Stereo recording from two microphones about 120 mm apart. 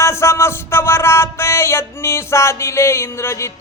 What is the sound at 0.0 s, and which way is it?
Music, 25° left (ahead or behind).